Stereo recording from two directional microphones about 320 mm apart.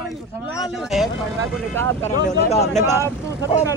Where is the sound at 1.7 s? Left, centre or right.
Right.